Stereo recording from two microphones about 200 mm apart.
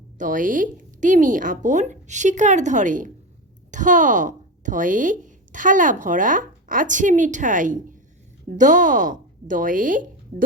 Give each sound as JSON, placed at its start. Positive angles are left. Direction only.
{"t": 0.2, "sound": "a woman's voice", "side_deg": -40}